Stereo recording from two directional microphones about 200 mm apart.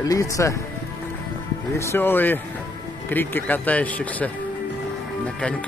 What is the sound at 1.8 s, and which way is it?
Speech, 10° left (ahead or behind).